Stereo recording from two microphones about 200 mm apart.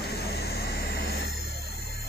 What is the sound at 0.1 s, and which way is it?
Vehicle, 55° left (ahead or behind).